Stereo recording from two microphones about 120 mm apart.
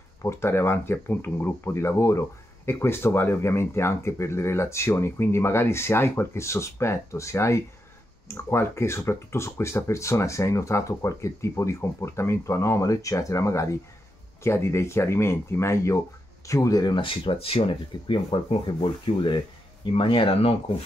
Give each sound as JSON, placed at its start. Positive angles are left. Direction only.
{"t": 0.2, "sound": "speech", "side_deg": 25}